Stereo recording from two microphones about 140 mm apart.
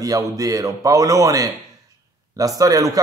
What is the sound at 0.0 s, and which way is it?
Speech, 25° right (ahead or behind).